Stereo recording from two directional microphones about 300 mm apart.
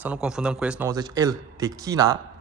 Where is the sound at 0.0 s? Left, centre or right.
Centre.